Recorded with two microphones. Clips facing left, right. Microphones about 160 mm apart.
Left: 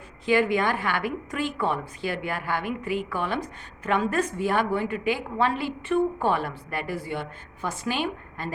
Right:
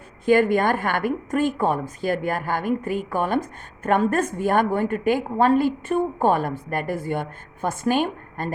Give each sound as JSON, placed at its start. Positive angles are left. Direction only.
{"t": 0.3, "sound": "a woman's voice", "side_deg": -50}